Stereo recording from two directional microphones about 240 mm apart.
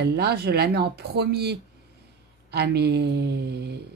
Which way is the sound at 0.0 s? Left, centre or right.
Right.